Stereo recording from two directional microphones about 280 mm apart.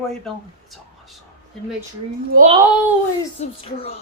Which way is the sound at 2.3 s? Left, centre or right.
Right.